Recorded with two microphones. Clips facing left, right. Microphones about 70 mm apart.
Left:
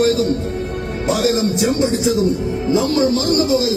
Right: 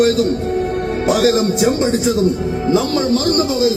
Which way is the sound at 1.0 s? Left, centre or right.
Right.